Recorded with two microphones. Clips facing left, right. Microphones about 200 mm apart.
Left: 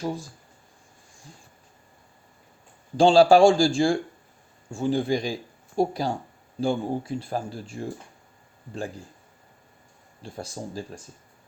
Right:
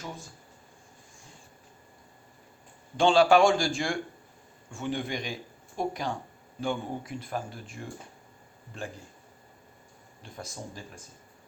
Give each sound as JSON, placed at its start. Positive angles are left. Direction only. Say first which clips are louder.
{"t": 3.0, "sound": "speech", "louder": "left 5 dB", "side_deg": 35}
{"t": 10.2, "sound": "speech", "louder": "left 6 dB", "side_deg": 30}